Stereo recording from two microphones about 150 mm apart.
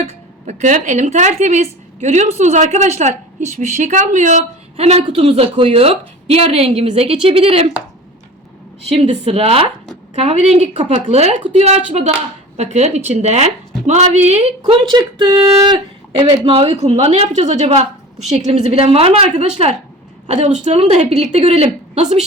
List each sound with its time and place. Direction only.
0.4 s a woman's voice: 55° right (ahead or behind)
8.9 s a woman's voice: 40° right (ahead or behind)
14.6 s a woman's voice: 30° right (ahead or behind)